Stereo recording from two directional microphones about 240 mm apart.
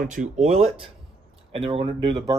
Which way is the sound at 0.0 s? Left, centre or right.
Right.